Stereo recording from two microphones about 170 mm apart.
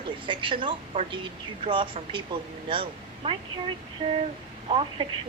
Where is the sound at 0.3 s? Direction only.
30° right (ahead or behind).